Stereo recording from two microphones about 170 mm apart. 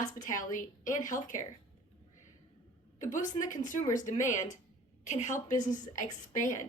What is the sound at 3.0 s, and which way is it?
A woman's voice, 50° left (ahead or behind).